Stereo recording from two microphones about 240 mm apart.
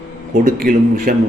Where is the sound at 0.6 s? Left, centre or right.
Right.